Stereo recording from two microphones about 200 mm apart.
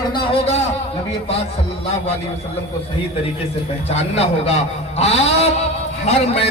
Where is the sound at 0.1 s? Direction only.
30° left (ahead or behind).